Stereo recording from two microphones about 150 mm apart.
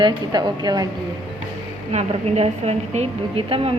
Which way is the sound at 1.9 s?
45° right (ahead or behind).